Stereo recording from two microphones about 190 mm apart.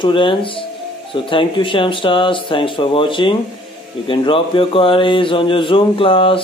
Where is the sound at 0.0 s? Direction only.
25° left (ahead or behind).